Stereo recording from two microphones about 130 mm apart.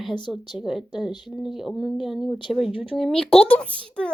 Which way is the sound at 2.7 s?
45° left (ahead or behind).